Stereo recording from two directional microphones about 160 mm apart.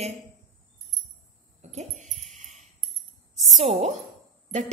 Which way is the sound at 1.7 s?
45° right (ahead or behind).